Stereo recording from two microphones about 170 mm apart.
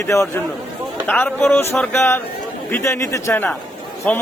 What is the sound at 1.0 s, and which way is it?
A man's voice, 10° left (ahead or behind).